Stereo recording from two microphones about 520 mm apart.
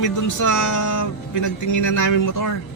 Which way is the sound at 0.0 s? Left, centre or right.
Left.